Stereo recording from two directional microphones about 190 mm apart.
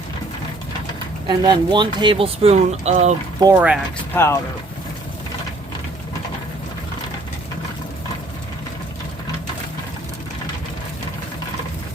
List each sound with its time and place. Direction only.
1.3 s speech: 25° right (ahead or behind)
3.4 s speech: 10° right (ahead or behind)
4.1 s speech: 15° left (ahead or behind)